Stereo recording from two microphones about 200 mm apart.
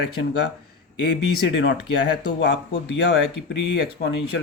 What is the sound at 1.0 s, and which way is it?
Speech, 60° left (ahead or behind).